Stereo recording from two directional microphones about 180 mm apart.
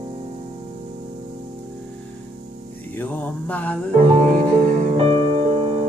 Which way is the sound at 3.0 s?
10° left (ahead or behind).